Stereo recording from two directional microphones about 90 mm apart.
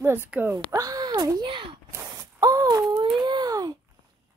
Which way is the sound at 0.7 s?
40° right (ahead or behind).